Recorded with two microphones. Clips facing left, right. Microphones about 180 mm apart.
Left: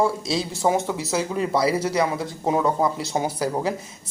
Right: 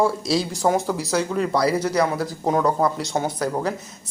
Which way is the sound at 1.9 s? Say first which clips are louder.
Right 2 dB; 5° left (ahead or behind).